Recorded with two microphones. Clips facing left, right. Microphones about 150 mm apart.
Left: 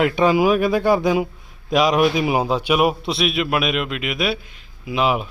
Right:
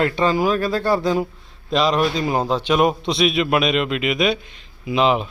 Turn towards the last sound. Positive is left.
turn(degrees=5)  # may be behind; listen again after turning